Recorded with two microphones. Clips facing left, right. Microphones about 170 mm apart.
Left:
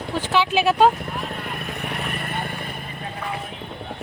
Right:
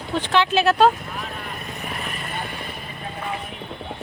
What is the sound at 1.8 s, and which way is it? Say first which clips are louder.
Vehicle: left 2 dB; 65° left (ahead or behind).